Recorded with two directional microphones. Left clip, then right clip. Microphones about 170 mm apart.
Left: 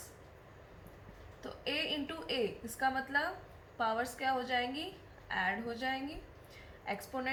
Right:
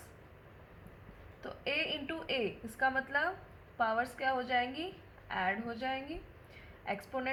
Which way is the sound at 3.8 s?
55° right (ahead or behind).